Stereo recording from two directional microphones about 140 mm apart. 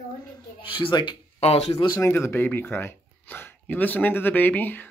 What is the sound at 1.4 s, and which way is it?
Speech, 45° left (ahead or behind).